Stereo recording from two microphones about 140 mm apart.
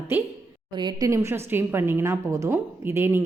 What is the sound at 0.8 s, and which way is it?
Speech, 30° right (ahead or behind).